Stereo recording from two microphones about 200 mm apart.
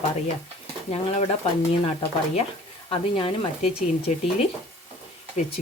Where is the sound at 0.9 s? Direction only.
30° left (ahead or behind).